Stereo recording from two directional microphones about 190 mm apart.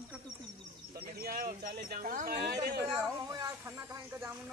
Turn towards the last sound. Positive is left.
turn(degrees=-15)  # may be behind; listen again after turning